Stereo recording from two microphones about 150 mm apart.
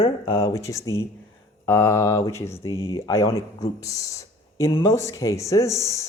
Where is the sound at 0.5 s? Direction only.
20° left (ahead or behind).